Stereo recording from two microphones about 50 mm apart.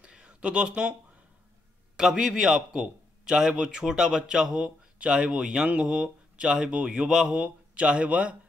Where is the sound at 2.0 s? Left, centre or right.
Centre.